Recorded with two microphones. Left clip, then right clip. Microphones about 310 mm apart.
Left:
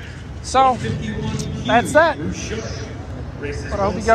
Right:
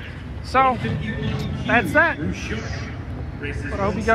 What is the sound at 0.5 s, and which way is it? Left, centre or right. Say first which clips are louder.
Speech: left 3 dB; centre.